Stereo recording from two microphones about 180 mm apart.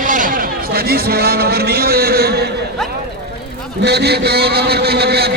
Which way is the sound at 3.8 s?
65° right (ahead or behind).